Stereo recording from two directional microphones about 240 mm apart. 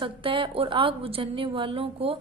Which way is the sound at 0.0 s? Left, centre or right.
Right.